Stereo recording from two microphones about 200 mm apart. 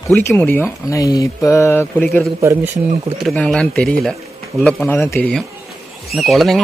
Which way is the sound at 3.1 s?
5° left (ahead or behind).